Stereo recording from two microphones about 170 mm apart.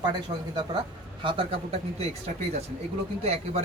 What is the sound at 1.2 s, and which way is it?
Speech, 30° right (ahead or behind).